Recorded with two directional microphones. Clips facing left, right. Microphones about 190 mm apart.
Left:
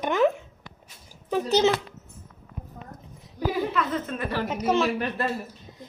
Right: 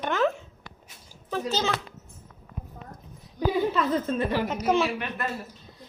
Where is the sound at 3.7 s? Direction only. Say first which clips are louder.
Right 3 dB; 30° right (ahead or behind).